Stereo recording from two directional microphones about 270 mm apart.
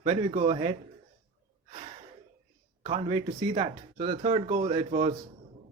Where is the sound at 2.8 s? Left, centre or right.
Centre.